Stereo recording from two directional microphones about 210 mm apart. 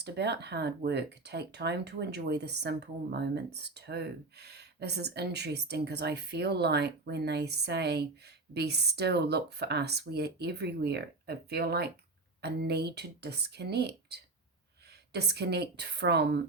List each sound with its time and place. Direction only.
0.0 s speech: 55° right (ahead or behind)